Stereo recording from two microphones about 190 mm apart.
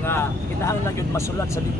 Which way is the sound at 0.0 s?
10° left (ahead or behind).